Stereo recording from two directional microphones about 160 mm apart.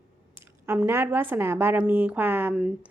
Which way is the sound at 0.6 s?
10° right (ahead or behind).